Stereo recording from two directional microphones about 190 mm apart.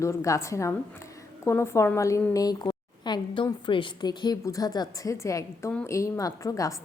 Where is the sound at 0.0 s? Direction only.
15° left (ahead or behind).